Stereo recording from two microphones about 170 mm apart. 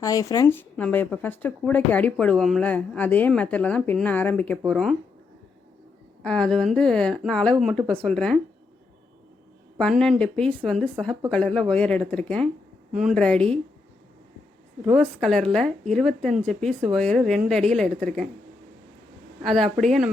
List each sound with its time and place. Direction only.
0.0 s a woman's voice: 20° left (ahead or behind); by 4.9 s 5° left (ahead or behind)
6.2 s a woman's voice: 5° left (ahead or behind)
9.7 s a woman's voice: 5° left (ahead or behind)
14.9 s a woman's voice: centre (ahead or behind)
19.4 s a woman's voice: centre (ahead or behind)